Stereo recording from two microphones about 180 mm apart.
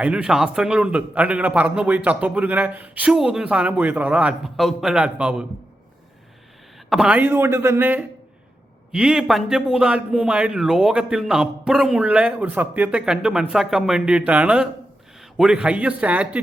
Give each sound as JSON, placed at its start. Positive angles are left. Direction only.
{"t": 0.0, "sound": "a man's voice", "side_deg": -5}
{"t": 6.9, "sound": "a man's voice", "side_deg": -5}